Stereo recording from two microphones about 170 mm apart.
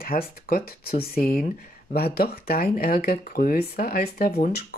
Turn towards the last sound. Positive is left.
turn(degrees=65)  # may be behind; listen again after turning